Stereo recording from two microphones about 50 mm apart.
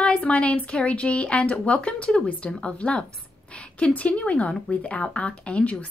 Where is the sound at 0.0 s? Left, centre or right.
Left.